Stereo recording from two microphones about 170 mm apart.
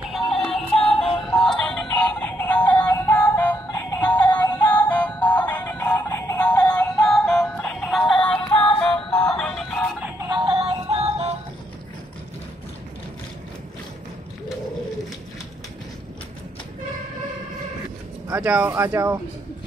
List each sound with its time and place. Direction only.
0.1 s music: 5° left (ahead or behind)
8.6 s music: 30° left (ahead or behind)
9.1 s music: 5° left (ahead or behind)
10.3 s music: 30° right (ahead or behind)
18.3 s speech: 10° right (ahead or behind)